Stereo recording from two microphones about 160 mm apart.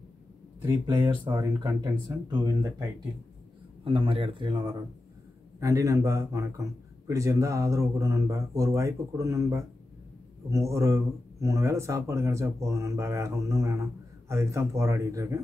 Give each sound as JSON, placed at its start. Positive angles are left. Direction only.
{"t": 1.3, "sound": "speech", "side_deg": -25}
{"t": 3.8, "sound": "speech", "side_deg": -35}